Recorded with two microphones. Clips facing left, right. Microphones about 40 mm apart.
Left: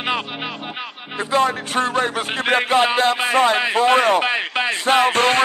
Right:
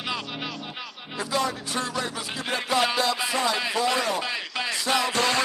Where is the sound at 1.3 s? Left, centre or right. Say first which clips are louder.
Left 9 dB; left.